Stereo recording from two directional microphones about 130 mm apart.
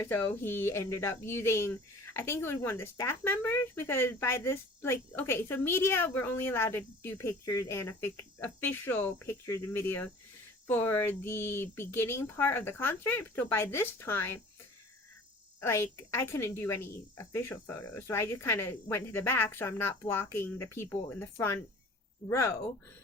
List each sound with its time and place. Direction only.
0.0 s speech: 15° left (ahead or behind)
15.6 s speech: 20° left (ahead or behind)